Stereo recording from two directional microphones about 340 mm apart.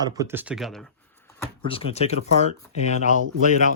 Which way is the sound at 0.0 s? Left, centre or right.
Centre.